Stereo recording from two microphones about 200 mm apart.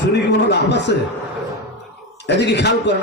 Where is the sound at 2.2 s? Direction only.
60° left (ahead or behind).